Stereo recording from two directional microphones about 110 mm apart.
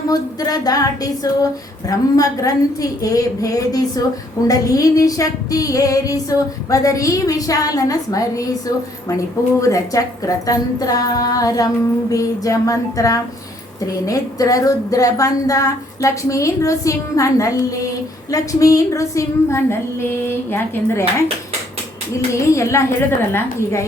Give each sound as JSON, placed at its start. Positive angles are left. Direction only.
{"t": 0.1, "sound": "a woman's voice", "side_deg": 35}